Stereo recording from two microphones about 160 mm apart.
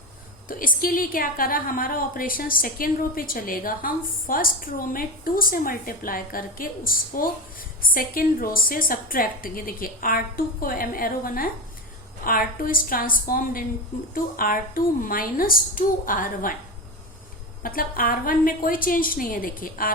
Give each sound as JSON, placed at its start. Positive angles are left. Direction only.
{"t": 0.4, "sound": "a woman's voice", "side_deg": 65}
{"t": 17.6, "sound": "a woman's voice", "side_deg": 65}